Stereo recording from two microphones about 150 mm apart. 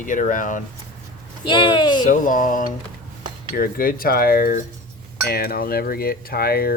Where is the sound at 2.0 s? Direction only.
60° left (ahead or behind).